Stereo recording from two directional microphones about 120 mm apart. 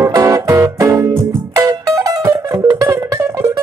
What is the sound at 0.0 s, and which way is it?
Music, 30° right (ahead or behind).